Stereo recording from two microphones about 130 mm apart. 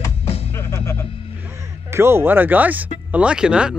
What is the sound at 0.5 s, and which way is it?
Music, 20° left (ahead or behind).